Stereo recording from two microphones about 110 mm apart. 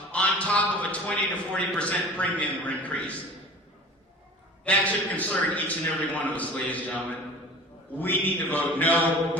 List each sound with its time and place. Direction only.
0.1 s a sound: 10° left (ahead or behind)
1.5 s a man's voice: 10° left (ahead or behind)
4.6 s a man's voice: 15° left (ahead or behind)